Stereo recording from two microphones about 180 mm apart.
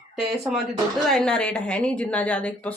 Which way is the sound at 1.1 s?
5° left (ahead or behind).